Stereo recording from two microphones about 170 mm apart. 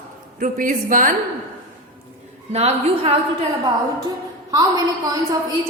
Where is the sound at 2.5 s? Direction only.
35° right (ahead or behind).